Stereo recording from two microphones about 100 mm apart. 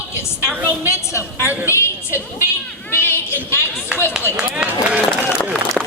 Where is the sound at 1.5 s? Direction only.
20° right (ahead or behind).